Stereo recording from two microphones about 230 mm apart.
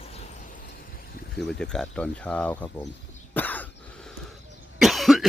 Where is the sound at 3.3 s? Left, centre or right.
Centre.